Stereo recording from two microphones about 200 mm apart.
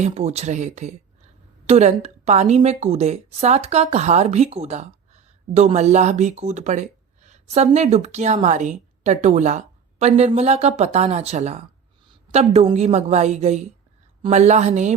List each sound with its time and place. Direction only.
0.0 s a woman's voice: 35° right (ahead or behind)